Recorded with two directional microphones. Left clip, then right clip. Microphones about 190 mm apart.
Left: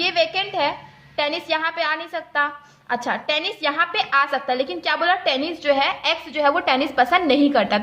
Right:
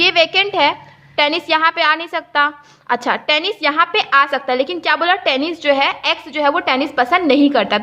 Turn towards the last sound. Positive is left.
turn(degrees=-25)  # may be behind; listen again after turning